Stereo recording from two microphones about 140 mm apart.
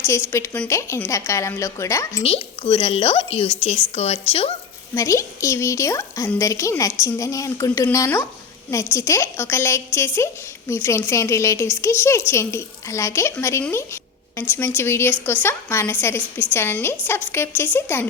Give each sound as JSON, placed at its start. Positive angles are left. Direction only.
{"t": 0.3, "sound": "a woman's voice", "side_deg": 20}
{"t": 2.2, "sound": "a woman's voice", "side_deg": 40}
{"t": 4.9, "sound": "a woman's voice", "side_deg": 25}